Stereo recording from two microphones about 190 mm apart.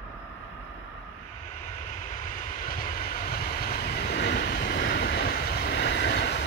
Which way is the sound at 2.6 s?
45° left (ahead or behind).